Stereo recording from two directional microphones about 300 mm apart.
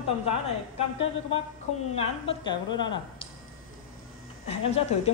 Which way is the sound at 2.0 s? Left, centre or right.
Centre.